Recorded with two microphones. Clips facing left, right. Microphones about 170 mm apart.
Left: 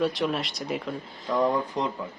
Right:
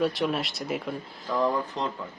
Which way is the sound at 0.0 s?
Centre (ahead or behind).